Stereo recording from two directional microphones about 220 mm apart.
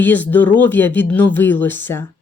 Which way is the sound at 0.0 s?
10° left (ahead or behind).